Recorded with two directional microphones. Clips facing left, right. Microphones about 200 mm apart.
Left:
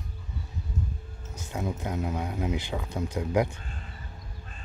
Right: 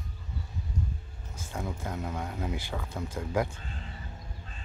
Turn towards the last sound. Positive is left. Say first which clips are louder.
# left 4 dB
turn(degrees=15)  # may be behind; listen again after turning